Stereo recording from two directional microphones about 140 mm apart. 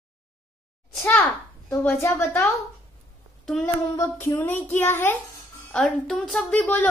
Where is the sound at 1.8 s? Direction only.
15° left (ahead or behind).